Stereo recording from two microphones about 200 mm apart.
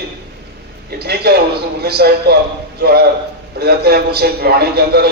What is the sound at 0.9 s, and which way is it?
A man's voice, 55° right (ahead or behind).